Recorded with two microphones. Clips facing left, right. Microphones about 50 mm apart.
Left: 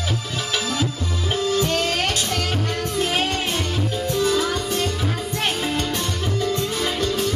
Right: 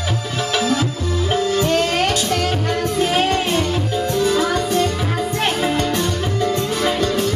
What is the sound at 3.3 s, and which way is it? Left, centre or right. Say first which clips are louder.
Music: right 6 dB; right.